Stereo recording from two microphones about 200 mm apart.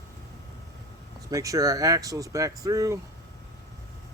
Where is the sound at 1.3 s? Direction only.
15° right (ahead or behind).